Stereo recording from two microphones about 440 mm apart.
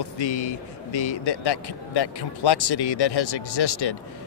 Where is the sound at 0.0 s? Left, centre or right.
Left.